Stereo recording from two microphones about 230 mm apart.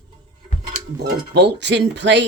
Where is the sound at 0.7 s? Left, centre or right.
Right.